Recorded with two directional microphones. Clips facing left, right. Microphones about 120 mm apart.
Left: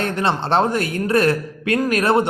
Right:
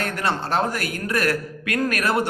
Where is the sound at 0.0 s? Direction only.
25° left (ahead or behind).